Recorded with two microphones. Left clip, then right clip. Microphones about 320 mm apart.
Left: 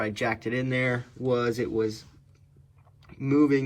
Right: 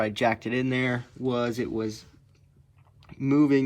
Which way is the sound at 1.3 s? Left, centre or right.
Centre.